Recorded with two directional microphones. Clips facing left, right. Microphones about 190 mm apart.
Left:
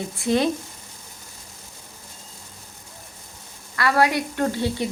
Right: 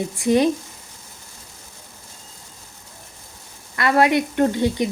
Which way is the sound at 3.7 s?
20° right (ahead or behind).